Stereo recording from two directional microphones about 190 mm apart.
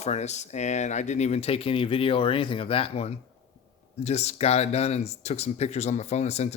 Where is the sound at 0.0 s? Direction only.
35° left (ahead or behind).